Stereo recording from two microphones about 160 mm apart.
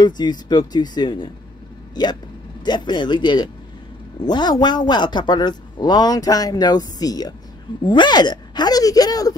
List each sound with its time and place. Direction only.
0.0 s speech: 25° left (ahead or behind)